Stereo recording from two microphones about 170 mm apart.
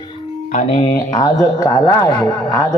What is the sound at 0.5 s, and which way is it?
Speech, 40° left (ahead or behind).